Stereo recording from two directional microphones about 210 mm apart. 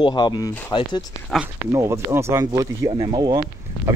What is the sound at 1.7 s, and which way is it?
Speech, 15° right (ahead or behind).